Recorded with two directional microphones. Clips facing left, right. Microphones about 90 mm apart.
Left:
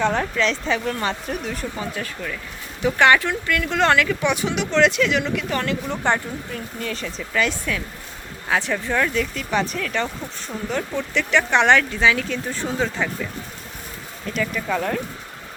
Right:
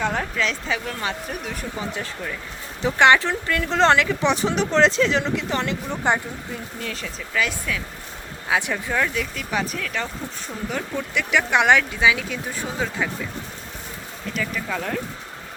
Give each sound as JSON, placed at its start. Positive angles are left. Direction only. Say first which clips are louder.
{"t": 0.0, "sound": "speech", "louder": "left 3 dB", "side_deg": -5}
{"t": 1.9, "sound": "speech", "louder": "left 1 dB", "side_deg": -20}
{"t": 6.7, "sound": "speech", "louder": "left 3 dB", "side_deg": 0}
{"t": 14.3, "sound": "speech", "louder": "left 4 dB", "side_deg": 0}